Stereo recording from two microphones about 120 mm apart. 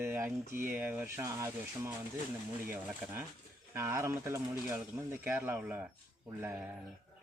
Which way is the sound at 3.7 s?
20° right (ahead or behind).